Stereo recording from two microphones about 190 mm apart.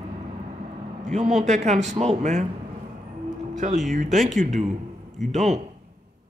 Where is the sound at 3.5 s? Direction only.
40° right (ahead or behind).